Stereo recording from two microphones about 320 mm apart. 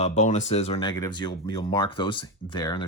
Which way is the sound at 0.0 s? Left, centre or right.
Left.